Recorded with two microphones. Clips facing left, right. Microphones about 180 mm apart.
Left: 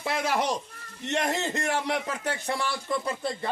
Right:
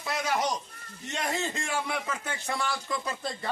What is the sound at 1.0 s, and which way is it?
Speech, 70° left (ahead or behind).